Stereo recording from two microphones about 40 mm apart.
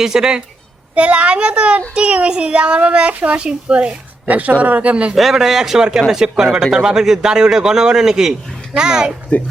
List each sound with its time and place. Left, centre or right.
0.0 s a man's voice: centre
0.9 s a child's voice: right
3.4 s speech: right
4.3 s a child's voice: right
5.1 s a man's voice: centre